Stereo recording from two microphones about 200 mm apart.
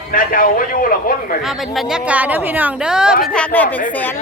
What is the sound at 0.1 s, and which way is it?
A man's voice, 45° left (ahead or behind).